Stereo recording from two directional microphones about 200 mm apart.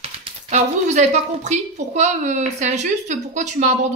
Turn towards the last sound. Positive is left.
turn(degrees=-35)  # may be behind; listen again after turning